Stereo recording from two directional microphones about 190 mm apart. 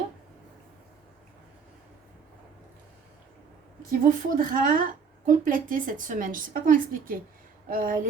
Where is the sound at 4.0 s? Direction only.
45° right (ahead or behind).